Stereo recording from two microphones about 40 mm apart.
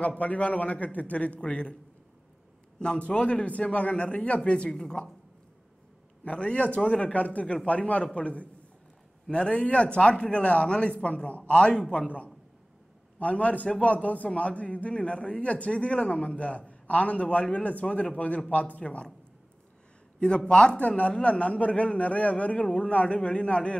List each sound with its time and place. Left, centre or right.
0.0 s a man's voice: left
3.1 s a man's voice: left
6.2 s a man's voice: left
13.2 s a man's voice: left
20.2 s a man's voice: left